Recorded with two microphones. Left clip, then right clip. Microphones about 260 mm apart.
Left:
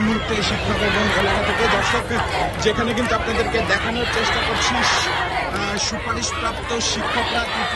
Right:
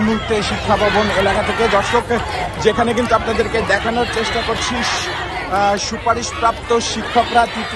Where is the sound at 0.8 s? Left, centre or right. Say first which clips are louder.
Right 2 dB; right.